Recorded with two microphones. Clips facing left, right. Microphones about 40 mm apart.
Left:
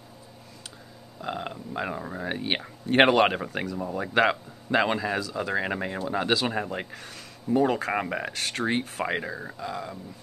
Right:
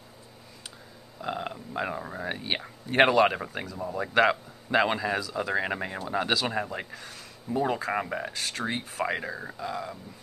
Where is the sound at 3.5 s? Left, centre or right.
Left.